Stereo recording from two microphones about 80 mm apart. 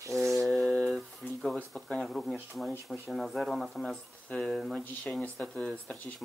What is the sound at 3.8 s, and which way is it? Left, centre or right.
Speech, centre.